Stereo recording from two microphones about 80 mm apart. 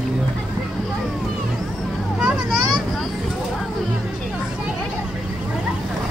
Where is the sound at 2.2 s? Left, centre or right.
Centre.